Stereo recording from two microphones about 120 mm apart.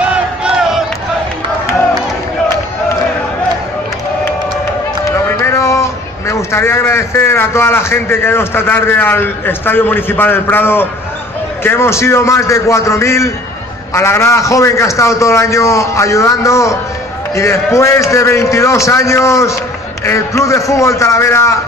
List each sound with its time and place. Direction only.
0.0 s battle cry: 10° right (ahead or behind)
5.0 s a man's voice: 25° left (ahead or behind)